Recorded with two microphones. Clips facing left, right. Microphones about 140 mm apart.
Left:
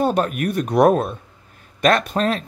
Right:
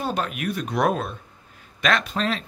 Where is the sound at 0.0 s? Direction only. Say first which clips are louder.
Left 7 dB; 45° left (ahead or behind).